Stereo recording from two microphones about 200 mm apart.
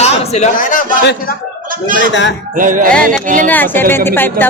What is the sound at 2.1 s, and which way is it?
Speech, 65° left (ahead or behind).